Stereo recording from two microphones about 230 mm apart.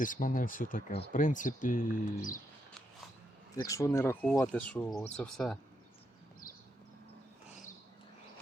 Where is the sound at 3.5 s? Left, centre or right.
Centre.